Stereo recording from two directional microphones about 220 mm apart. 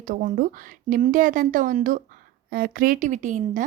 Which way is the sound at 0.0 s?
35° right (ahead or behind).